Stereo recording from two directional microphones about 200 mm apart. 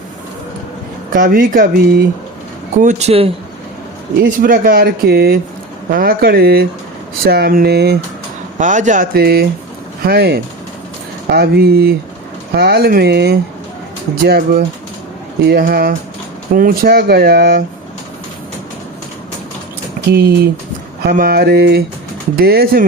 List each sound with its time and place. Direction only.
1.1 s speech: 45° right (ahead or behind)
4.2 s speech: 45° right (ahead or behind)
8.5 s speech: 40° right (ahead or behind)
20.1 s speech: 50° right (ahead or behind)